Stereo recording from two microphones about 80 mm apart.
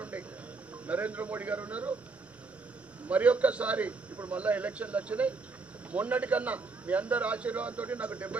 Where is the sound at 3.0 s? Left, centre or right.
Centre.